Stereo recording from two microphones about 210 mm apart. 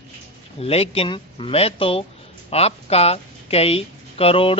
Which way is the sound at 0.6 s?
30° left (ahead or behind).